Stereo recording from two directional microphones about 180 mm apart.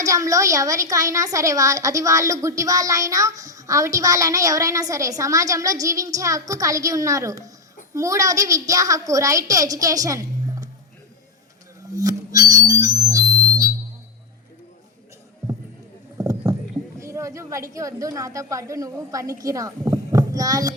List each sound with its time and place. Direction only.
0.0 s a woman's voice: 20° right (ahead or behind)
11.9 s music: 20° right (ahead or behind)
16.1 s rowboat: 20° right (ahead or behind)
17.0 s speech: 15° right (ahead or behind)